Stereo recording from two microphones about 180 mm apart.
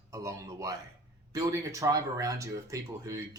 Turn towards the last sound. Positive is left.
turn(degrees=-15)  # may be behind; listen again after turning